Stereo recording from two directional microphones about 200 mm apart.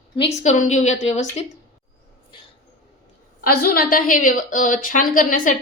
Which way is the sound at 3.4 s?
50° left (ahead or behind).